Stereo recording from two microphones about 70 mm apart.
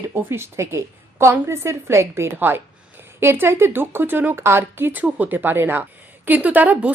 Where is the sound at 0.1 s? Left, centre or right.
Right.